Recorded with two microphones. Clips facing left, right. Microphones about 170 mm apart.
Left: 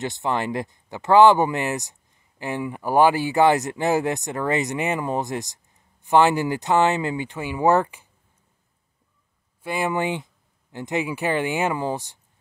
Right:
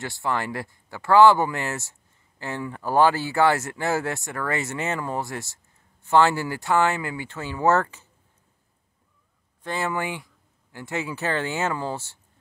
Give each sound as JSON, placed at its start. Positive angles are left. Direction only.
{"t": 0.0, "sound": "speech", "side_deg": 20}
{"t": 9.6, "sound": "speech", "side_deg": 10}